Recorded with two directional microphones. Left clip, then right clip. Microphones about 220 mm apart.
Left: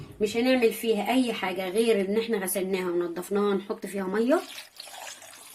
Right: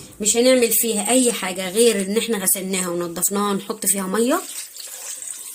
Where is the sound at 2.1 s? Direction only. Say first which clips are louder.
Right 5 dB; 45° right (ahead or behind).